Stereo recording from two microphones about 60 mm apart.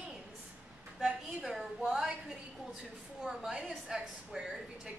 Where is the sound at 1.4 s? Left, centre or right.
Centre.